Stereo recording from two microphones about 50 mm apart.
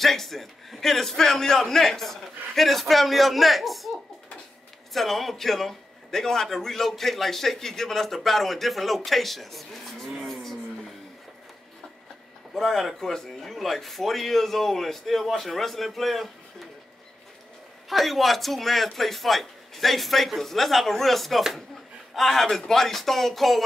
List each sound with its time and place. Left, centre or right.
0.0 s a man's voice: centre
4.9 s a man's voice: centre
12.5 s a man's voice: centre
17.8 s a man's voice: centre